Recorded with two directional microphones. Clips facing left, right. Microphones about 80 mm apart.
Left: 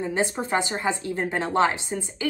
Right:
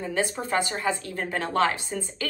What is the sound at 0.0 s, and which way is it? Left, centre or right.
A woman's voice, left.